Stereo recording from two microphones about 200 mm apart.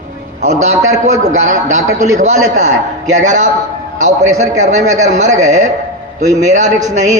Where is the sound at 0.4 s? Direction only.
35° right (ahead or behind).